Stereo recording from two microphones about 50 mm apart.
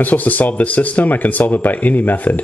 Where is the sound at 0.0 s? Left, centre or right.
Left.